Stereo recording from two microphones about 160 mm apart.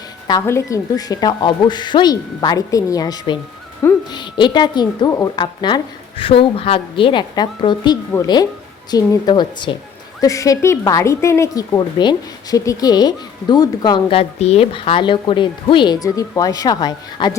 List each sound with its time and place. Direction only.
0.3 s speech: 20° left (ahead or behind)